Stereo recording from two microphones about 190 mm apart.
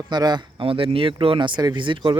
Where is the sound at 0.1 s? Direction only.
20° right (ahead or behind).